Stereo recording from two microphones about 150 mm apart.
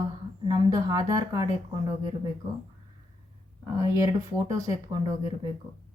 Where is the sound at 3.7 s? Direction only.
20° right (ahead or behind).